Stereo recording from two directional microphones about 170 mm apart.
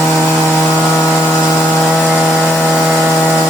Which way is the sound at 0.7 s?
10° left (ahead or behind).